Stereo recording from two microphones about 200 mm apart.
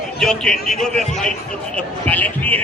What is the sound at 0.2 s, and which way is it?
A man's voice, 5° left (ahead or behind).